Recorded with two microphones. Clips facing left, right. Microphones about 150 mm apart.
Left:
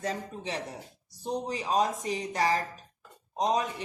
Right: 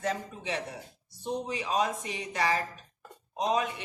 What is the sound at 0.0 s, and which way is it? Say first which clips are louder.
Speech: right 1 dB; 35° left (ahead or behind).